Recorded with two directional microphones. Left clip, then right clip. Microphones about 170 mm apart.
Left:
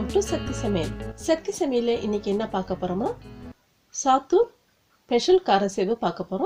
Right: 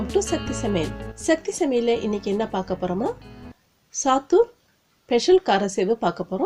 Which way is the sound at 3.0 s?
Centre (ahead or behind).